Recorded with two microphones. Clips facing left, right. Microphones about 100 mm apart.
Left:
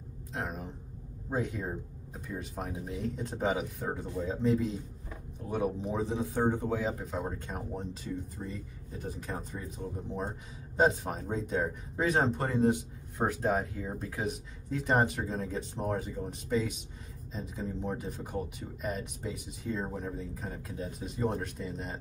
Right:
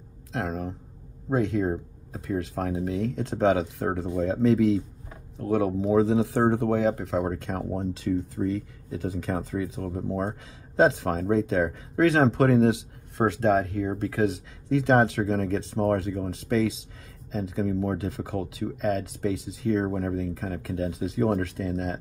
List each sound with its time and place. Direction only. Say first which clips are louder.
0.3 s speech: right 7 dB; 90° right
4.2 s speech: right 8 dB; 90° right